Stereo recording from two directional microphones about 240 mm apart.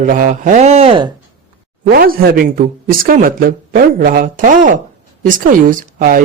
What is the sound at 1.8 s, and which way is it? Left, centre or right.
A woman's voice, right.